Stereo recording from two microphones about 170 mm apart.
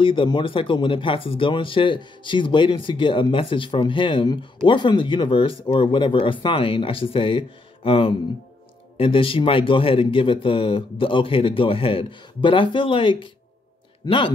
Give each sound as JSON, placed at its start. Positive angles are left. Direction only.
{"t": 0.0, "sound": "a man's voice", "side_deg": 30}